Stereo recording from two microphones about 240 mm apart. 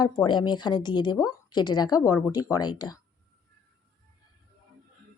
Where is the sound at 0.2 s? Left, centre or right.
Centre.